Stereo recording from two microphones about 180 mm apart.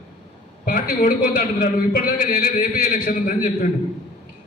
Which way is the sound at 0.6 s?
50° left (ahead or behind).